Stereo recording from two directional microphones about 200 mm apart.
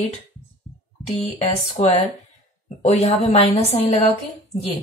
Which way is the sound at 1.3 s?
30° left (ahead or behind).